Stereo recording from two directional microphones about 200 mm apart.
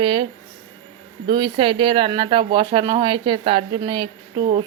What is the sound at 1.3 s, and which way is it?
Speech, 20° right (ahead or behind).